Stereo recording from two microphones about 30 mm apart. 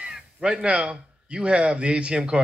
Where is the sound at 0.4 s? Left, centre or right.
Right.